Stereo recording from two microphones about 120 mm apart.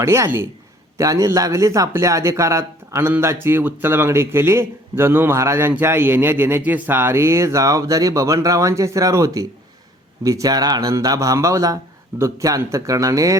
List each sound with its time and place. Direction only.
0.0 s speech: 25° right (ahead or behind)